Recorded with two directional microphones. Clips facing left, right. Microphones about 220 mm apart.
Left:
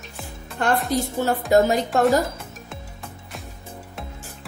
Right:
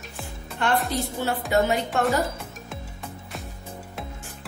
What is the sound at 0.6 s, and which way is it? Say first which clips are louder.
Music: left 3 dB; 45° left (ahead or behind).